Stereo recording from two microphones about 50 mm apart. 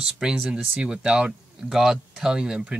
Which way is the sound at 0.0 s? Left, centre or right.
Centre.